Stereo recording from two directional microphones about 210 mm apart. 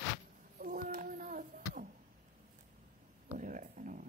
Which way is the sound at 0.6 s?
40° right (ahead or behind).